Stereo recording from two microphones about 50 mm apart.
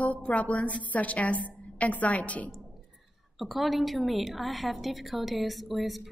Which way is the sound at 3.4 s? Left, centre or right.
Centre.